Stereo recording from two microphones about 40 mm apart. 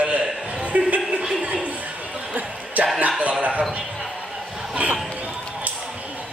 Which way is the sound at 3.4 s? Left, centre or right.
Right.